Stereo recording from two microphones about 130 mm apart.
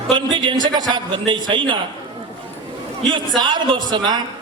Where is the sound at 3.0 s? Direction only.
35° right (ahead or behind).